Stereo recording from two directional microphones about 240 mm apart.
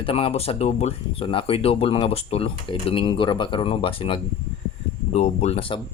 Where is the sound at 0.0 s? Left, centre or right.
Left.